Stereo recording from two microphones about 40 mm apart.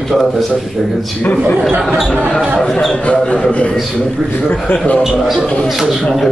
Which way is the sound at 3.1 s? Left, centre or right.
Left.